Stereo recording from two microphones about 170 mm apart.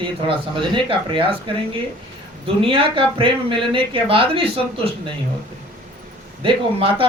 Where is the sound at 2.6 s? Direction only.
30° right (ahead or behind).